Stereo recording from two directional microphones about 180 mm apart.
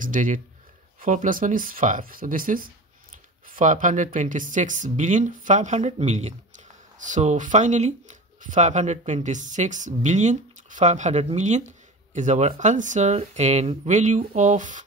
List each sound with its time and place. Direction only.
0.0 s speech: 45° right (ahead or behind)